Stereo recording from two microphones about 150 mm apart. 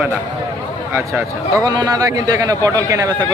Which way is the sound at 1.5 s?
25° right (ahead or behind).